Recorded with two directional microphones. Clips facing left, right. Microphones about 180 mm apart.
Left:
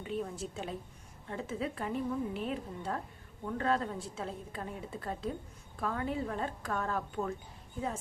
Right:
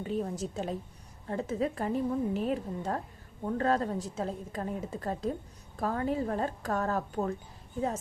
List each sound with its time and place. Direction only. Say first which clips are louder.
0.0 s a woman's voice: right 4 dB; 40° right (ahead or behind)